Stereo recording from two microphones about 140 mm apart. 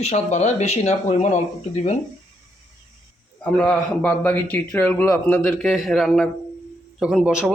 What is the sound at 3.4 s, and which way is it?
A man's voice, 10° left (ahead or behind).